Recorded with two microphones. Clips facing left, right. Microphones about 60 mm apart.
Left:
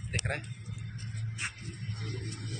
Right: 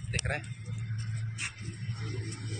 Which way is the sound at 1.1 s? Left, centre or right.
Right.